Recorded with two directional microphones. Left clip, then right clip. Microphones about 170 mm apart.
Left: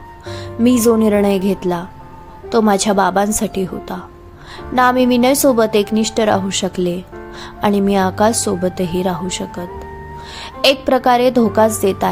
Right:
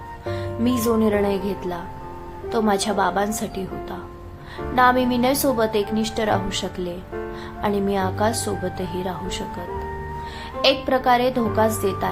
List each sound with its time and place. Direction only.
0.3 s a woman's voice: 35° left (ahead or behind)
10.6 s a woman's voice: 40° left (ahead or behind)